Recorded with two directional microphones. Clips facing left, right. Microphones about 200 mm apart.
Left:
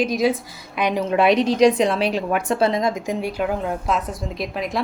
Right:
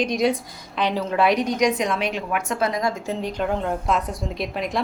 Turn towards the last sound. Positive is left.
turn(degrees=0)  # may be behind; listen again after turning